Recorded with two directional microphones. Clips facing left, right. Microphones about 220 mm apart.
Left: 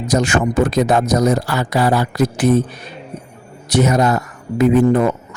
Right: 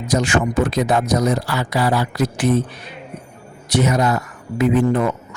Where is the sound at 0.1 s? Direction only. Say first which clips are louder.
Left 2 dB; 45° left (ahead or behind).